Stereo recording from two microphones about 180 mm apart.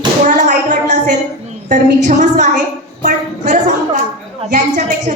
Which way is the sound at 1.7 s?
45° right (ahead or behind).